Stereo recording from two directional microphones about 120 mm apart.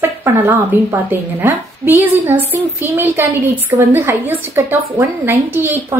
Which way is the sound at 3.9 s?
15° right (ahead or behind).